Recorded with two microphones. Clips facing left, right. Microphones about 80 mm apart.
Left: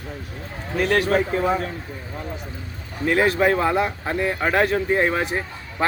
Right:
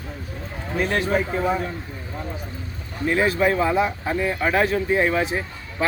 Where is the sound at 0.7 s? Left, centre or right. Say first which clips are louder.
Left 3 dB; left.